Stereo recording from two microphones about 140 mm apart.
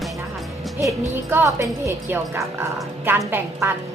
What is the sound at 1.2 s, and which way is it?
A woman's voice, 20° right (ahead or behind).